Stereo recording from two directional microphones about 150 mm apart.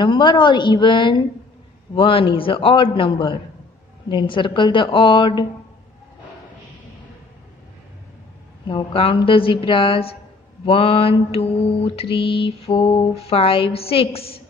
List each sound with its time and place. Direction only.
0.0 s mantra: 30° left (ahead or behind)
8.6 s mantra: 35° left (ahead or behind)